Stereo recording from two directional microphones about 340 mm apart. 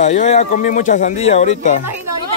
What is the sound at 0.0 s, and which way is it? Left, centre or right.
Speech, centre.